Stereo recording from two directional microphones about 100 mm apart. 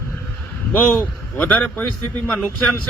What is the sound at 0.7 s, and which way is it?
A man's voice, 15° left (ahead or behind).